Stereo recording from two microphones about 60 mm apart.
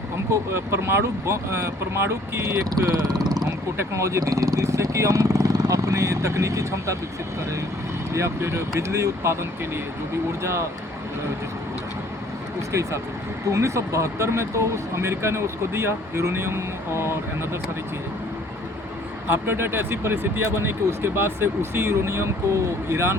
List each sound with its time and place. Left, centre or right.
0.5 s speech: right
2.4 s speech: right
3.9 s speech: right
8.1 s speech: right
13.5 s speech: right
19.3 s speech: right